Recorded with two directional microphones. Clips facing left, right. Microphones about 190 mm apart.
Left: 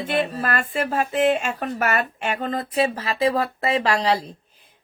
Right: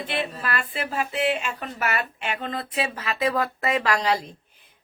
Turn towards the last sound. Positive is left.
turn(degrees=30)  # may be behind; listen again after turning